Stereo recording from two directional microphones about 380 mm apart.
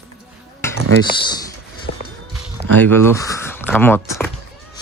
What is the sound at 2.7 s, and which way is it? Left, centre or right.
Speech, centre.